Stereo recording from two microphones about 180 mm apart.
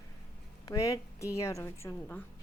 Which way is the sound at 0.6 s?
20° left (ahead or behind).